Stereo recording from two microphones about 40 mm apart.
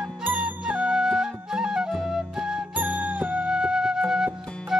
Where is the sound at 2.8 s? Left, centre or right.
Right.